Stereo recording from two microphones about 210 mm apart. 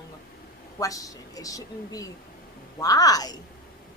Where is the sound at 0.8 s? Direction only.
15° left (ahead or behind).